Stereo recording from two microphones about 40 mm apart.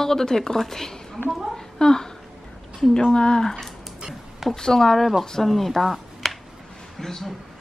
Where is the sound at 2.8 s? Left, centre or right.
Centre.